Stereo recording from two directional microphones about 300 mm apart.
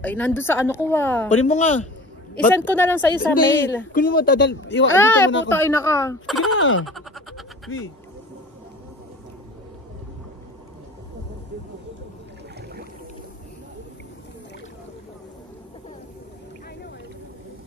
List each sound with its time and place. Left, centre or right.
0.0 s a woman's voice: centre
1.5 s a man's voice: left
2.3 s a woman's voice: centre
3.9 s speech: left
4.9 s a woman's voice: centre
6.8 s a sound: centre